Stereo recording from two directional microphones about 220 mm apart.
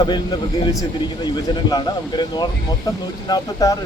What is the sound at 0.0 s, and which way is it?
Speech, 20° left (ahead or behind).